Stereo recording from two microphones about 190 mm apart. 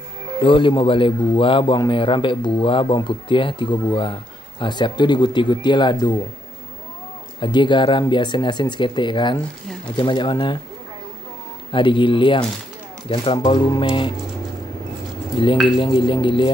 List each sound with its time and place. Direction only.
0.4 s a man's voice: 25° left (ahead or behind)
7.3 s a man's voice: 25° left (ahead or behind)
11.7 s a man's voice: 25° left (ahead or behind)
15.8 s a man's voice: 25° left (ahead or behind)